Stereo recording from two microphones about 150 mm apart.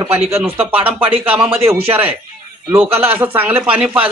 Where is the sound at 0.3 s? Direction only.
15° right (ahead or behind).